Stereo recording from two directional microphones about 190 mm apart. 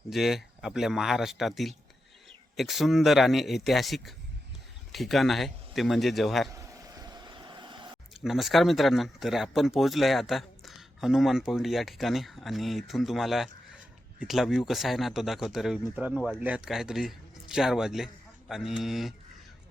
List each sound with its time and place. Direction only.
0.1 s speech: centre (ahead or behind)
6.5 s a sound: 20° right (ahead or behind)
8.1 s a man's voice: centre (ahead or behind)